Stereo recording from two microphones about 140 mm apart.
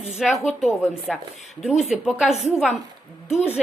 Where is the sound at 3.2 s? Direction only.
50° left (ahead or behind).